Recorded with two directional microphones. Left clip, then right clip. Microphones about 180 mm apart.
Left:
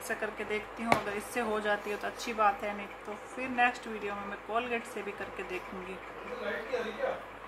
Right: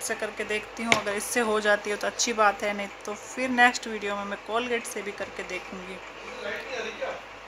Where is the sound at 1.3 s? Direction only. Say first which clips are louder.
Right 8 dB; 50° right (ahead or behind).